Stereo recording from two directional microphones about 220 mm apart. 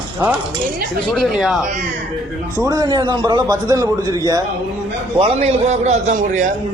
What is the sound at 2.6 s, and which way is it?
A man's voice, 15° right (ahead or behind).